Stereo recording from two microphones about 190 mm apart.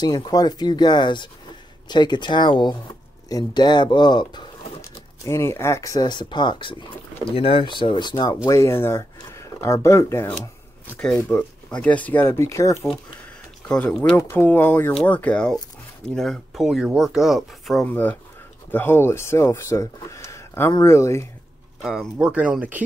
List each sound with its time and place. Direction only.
0.0 s speech: 20° left (ahead or behind)
13.7 s speech: 5° left (ahead or behind)
21.8 s speech: centre (ahead or behind)